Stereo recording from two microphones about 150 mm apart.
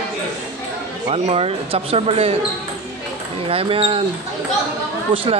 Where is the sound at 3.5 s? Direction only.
40° right (ahead or behind).